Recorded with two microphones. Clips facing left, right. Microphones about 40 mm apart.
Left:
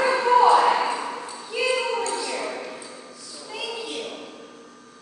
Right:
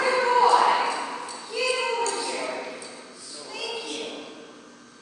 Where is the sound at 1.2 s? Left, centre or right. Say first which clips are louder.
Left 2 dB; left.